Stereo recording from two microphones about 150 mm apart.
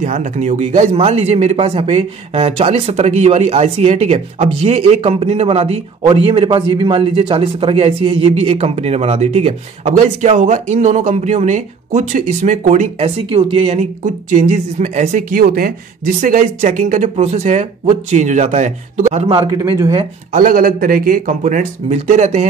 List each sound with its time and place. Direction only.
0.0 s a man's voice: 55° right (ahead or behind)
13.0 s a man's voice: 35° right (ahead or behind)
14.0 s speech: 55° right (ahead or behind)
15.3 s speech: 85° right
16.2 s speech: 65° right (ahead or behind); by 19.3 s 45° right (ahead or behind)
19.3 s a man's voice: 30° right (ahead or behind)
20.3 s speech: 70° right (ahead or behind); by 22.5 s 50° right (ahead or behind)